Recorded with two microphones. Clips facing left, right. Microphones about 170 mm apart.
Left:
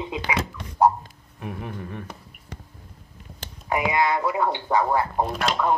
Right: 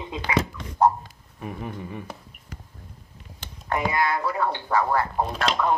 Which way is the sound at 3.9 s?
20° left (ahead or behind).